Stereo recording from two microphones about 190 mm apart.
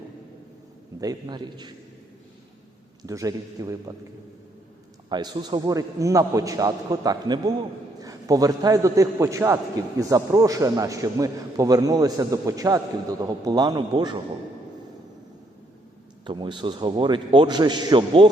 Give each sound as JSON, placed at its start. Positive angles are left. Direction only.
{"t": 1.0, "sound": "a man's voice", "side_deg": -20}
{"t": 3.1, "sound": "a man's voice", "side_deg": -20}
{"t": 5.0, "sound": "a man's voice", "side_deg": -20}
{"t": 16.2, "sound": "a man's voice", "side_deg": -25}